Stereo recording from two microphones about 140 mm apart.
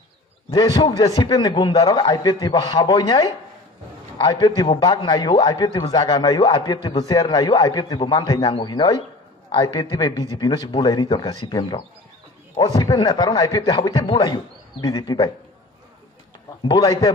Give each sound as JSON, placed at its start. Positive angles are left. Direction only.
{"t": 0.5, "sound": "a man's voice", "side_deg": 30}
{"t": 16.6, "sound": "a man's voice", "side_deg": 30}